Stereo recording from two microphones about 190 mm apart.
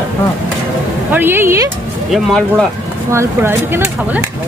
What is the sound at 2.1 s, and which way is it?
Speech, 5° left (ahead or behind).